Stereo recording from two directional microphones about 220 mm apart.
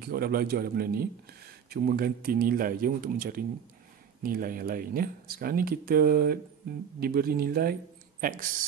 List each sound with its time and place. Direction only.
0.0 s a man's voice: 45° right (ahead or behind)